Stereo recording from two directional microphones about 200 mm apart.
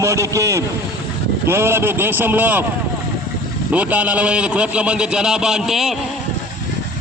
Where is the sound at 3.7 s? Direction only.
5° right (ahead or behind).